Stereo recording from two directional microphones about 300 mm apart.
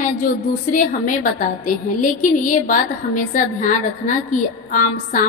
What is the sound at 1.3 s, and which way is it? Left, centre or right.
A woman's voice, left.